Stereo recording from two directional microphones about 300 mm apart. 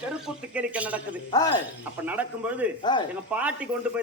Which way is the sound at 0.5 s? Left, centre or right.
Centre.